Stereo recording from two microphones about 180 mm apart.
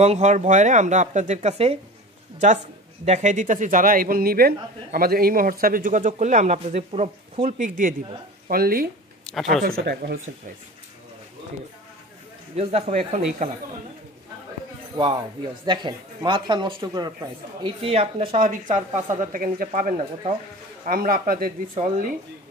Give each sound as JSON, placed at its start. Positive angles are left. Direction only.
{"t": 0.0, "sound": "speech", "side_deg": -40}
{"t": 3.1, "sound": "speech", "side_deg": -40}
{"t": 8.5, "sound": "speech", "side_deg": -55}
{"t": 9.2, "sound": "a sound", "side_deg": 0}
{"t": 9.6, "sound": "speech", "side_deg": -60}
{"t": 12.5, "sound": "speech", "side_deg": -35}
{"t": 15.0, "sound": "speech", "side_deg": -25}
{"t": 18.4, "sound": "speech", "side_deg": -45}
{"t": 21.7, "sound": "speech", "side_deg": -45}